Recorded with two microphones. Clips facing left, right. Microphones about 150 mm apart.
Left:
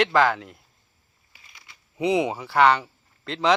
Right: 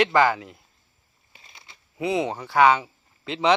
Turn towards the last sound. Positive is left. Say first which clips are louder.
# right 1 dB
turn(degrees=-5)  # may be behind; listen again after turning